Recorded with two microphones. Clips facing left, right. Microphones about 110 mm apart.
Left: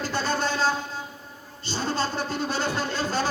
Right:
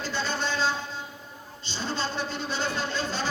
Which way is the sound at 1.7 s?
45° left (ahead or behind).